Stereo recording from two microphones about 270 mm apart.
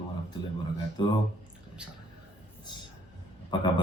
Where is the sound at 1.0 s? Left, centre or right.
Centre.